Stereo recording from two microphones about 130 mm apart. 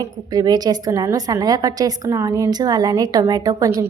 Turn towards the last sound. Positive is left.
turn(degrees=-25)  # may be behind; listen again after turning